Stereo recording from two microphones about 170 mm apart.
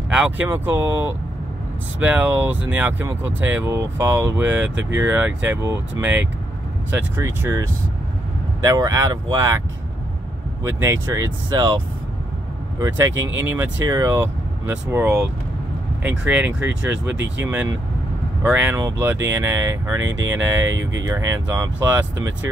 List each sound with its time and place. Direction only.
0.1 s speech: 10° right (ahead or behind)
8.6 s speech: 20° right (ahead or behind)
10.6 s speech: 15° right (ahead or behind)
16.9 s speech: 90° right
17.4 s speech: 10° right (ahead or behind)